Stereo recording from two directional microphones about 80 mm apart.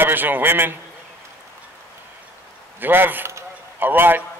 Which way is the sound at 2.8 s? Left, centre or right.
Right.